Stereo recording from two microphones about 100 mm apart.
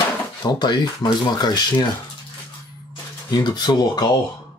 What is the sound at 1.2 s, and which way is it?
Speech, 45° left (ahead or behind).